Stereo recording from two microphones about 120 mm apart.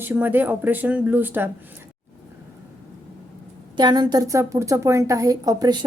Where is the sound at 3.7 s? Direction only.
35° right (ahead or behind).